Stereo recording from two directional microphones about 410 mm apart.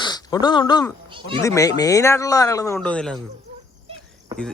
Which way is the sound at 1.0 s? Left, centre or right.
Centre.